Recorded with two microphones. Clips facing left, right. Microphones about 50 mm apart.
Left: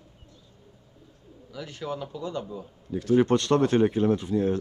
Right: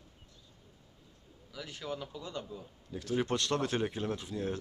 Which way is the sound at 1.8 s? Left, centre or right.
Centre.